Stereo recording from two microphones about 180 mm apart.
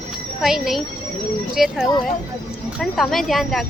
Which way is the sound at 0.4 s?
Centre (ahead or behind).